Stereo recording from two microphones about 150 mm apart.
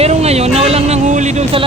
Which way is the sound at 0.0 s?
45° right (ahead or behind).